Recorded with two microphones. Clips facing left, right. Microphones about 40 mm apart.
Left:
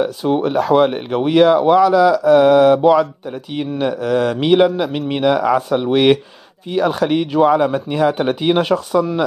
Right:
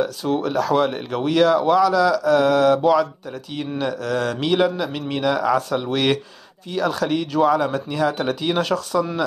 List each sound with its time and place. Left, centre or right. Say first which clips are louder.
0.0 s speech: left 5 dB; left